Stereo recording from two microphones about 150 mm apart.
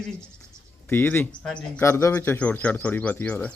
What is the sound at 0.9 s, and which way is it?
Speech, 15° left (ahead or behind).